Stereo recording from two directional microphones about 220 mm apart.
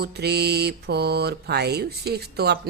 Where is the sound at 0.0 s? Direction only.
45° right (ahead or behind).